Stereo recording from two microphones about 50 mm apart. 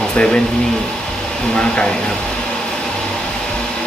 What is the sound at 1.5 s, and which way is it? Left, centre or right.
Speech, centre.